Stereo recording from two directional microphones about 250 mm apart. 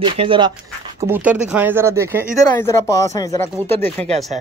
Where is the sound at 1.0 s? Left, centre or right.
Centre.